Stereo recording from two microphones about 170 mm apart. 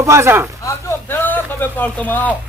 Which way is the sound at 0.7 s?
15° left (ahead or behind).